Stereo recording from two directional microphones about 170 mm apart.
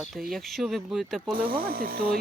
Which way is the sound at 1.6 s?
60° right (ahead or behind).